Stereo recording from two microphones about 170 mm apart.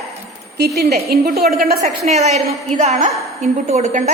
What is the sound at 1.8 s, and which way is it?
A woman's voice, 40° right (ahead or behind).